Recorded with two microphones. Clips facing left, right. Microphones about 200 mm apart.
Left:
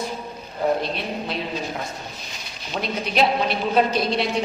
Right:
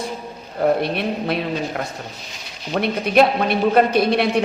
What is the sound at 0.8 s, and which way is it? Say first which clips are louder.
A man's voice: right 5 dB; 60° right (ahead or behind).